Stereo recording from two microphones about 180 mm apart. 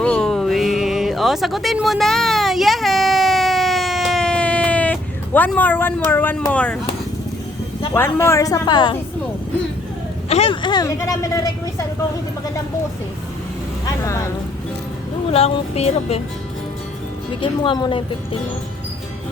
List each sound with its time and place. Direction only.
0.0 s a sound: 5° left (ahead or behind)
6.5 s a woman's voice: 5° left (ahead or behind)
7.9 s a woman's voice: 15° left (ahead or behind)
10.2 s speech: 35° left (ahead or behind); by 11.7 s 15° left (ahead or behind)
13.8 s vehicle: 15° left (ahead or behind)
15.3 s speech: 35° left (ahead or behind)
17.4 s speech: 25° left (ahead or behind)